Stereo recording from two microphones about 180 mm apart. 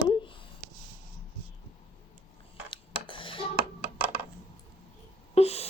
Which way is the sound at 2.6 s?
25° left (ahead or behind).